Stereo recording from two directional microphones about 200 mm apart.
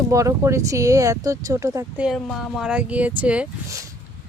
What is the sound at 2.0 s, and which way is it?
Speech, centre (ahead or behind).